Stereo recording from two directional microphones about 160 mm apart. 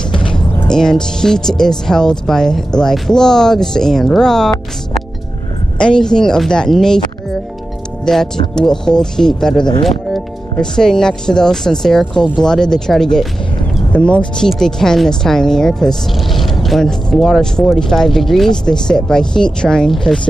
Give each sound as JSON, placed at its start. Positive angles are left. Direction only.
{"t": 0.1, "sound": "music", "side_deg": 30}
{"t": 0.7, "sound": "speech", "side_deg": 5}
{"t": 5.8, "sound": "speech", "side_deg": 5}
{"t": 8.0, "sound": "speech", "side_deg": 5}
{"t": 14.4, "sound": "speech", "side_deg": 5}